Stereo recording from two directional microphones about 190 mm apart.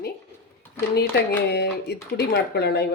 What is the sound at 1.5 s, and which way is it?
A woman's voice, 60° left (ahead or behind).